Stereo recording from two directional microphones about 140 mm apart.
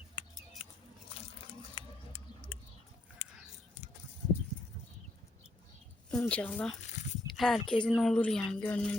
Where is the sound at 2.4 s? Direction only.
10° left (ahead or behind).